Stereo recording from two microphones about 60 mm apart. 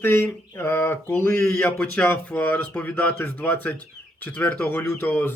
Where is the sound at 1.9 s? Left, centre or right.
Left.